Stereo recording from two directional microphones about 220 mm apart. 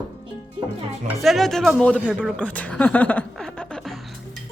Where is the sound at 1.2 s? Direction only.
Centre (ahead or behind).